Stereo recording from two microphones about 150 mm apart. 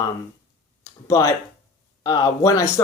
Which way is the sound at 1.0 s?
20° left (ahead or behind).